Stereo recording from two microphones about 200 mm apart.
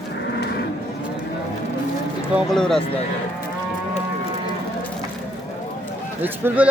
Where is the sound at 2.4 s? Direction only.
Centre (ahead or behind).